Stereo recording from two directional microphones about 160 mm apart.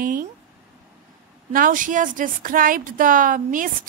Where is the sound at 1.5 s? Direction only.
60° right (ahead or behind).